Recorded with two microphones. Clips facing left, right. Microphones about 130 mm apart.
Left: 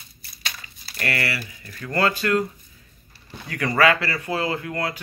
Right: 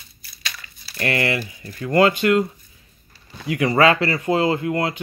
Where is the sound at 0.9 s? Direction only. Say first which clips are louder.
Right 5 dB; 20° right (ahead or behind).